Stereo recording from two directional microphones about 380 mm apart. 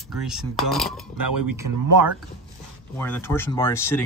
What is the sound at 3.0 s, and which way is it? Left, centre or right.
Speech, centre.